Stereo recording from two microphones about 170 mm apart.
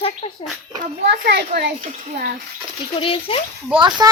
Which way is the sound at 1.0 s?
70° right (ahead or behind).